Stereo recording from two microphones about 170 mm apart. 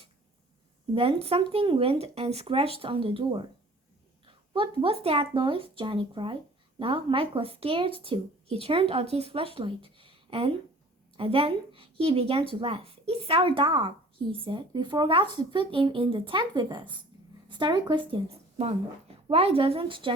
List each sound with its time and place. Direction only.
0.9 s speech: 35° right (ahead or behind)